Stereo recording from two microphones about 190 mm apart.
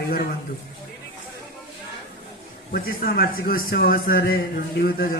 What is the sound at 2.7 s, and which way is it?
A man's voice, 50° left (ahead or behind).